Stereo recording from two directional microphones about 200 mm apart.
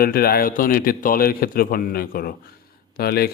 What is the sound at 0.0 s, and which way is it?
Speech, 50° left (ahead or behind).